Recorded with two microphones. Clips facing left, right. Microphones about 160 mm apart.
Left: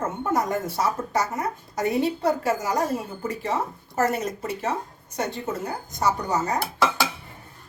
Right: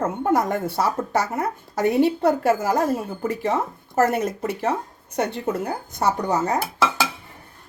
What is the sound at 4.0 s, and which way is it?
Speech, 55° right (ahead or behind).